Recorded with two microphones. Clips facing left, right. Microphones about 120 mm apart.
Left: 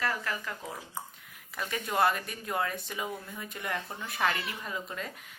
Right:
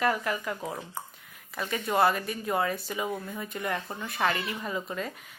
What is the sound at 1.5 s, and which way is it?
Speech, centre (ahead or behind).